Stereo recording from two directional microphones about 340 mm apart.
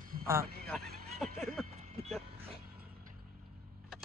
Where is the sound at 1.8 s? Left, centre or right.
Centre.